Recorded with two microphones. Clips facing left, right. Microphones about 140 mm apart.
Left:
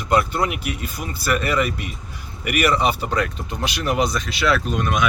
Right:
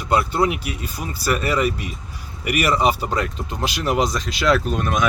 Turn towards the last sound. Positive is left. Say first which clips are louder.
# even
turn(degrees=-35)  # may be behind; listen again after turning